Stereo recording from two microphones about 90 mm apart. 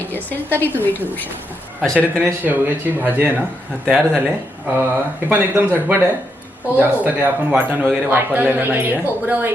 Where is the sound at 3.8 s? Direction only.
5° left (ahead or behind).